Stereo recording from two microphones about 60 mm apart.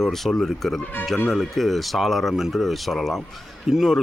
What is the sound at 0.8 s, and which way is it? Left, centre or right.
Speech, left.